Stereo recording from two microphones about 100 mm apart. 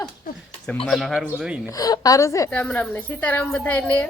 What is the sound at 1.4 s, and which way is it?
Speech, 10° right (ahead or behind).